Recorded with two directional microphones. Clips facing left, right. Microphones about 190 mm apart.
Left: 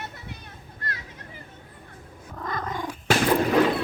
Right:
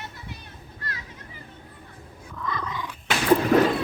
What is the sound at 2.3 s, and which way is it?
Cat, 45° left (ahead or behind).